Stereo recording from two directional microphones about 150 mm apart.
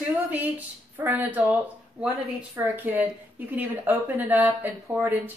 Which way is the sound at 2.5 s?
10° right (ahead or behind).